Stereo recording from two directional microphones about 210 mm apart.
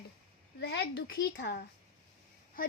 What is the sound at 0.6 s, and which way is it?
A child's voice, 50° left (ahead or behind).